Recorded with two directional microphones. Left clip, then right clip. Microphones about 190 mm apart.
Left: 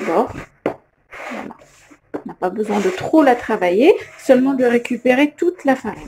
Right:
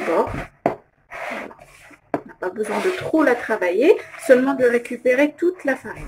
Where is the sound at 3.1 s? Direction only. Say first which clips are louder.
Left 5 dB; 30° left (ahead or behind).